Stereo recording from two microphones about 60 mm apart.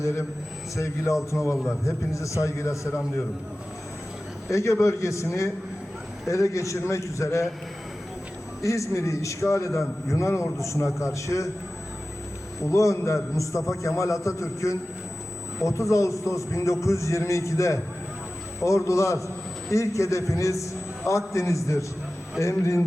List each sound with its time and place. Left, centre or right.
0.8 s a man's voice: left
4.5 s a man's voice: left
8.6 s a man's voice: left
12.7 s a man's voice: left